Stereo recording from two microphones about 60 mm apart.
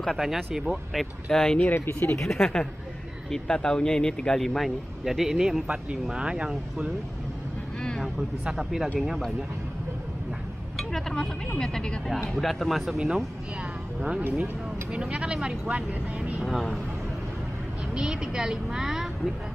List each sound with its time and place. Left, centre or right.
0.0 s speech: centre
1.3 s speech: centre
1.9 s speech: left
2.4 s speech: centre
6.1 s a woman's voice: centre
8.5 s a woman's voice: centre
10.8 s speech: centre
12.4 s speech: centre
14.2 s speech: right
16.4 s speech: centre
17.9 s a woman's voice: centre